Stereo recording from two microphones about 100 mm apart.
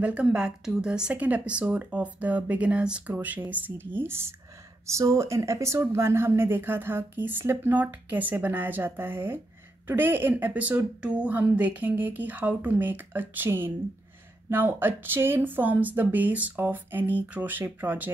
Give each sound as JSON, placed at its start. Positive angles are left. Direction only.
{"t": 0.0, "sound": "speech", "side_deg": -10}